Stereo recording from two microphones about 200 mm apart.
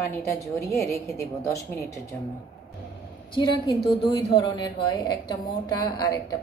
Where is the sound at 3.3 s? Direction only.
25° left (ahead or behind).